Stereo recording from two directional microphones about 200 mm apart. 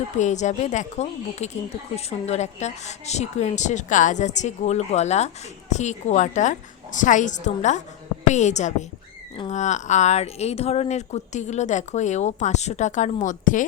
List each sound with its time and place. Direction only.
0.2 s a woman's voice: 35° left (ahead or behind)